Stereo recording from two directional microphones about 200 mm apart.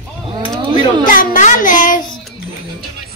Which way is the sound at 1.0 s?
45° left (ahead or behind).